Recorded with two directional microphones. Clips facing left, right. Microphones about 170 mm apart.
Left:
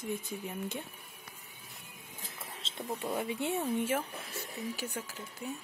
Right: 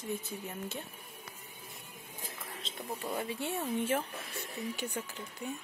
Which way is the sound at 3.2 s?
15° left (ahead or behind).